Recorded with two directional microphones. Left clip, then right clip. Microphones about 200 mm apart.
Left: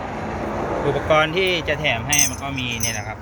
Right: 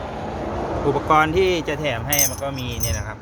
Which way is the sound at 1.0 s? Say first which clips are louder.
Right 1 dB; 30° right (ahead or behind).